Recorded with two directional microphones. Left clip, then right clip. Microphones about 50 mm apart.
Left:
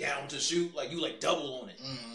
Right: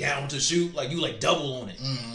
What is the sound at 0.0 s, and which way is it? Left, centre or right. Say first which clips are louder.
Speech: right 6 dB; centre.